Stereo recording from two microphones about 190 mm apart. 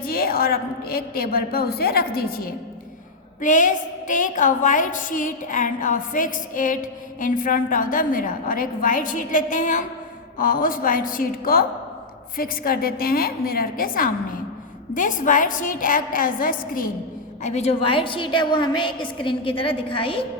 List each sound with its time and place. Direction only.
0.0 s a woman's voice: 50° left (ahead or behind)
17.4 s a woman's voice: 35° left (ahead or behind)